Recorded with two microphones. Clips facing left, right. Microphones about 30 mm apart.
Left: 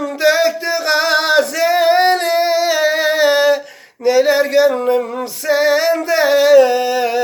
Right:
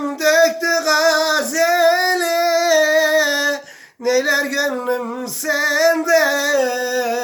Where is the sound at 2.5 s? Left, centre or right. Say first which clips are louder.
Even; left.